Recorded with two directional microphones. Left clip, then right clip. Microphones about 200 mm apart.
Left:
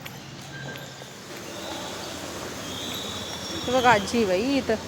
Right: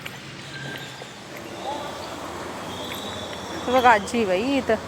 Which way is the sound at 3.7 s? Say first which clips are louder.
Right 3 dB; centre (ahead or behind).